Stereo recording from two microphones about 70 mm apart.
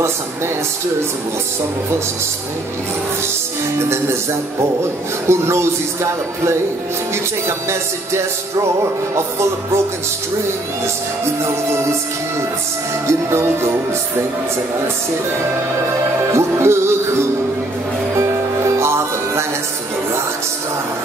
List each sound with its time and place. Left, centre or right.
5.3 s speech: right
7.4 s music: right
13.0 s music: right
16.3 s music: right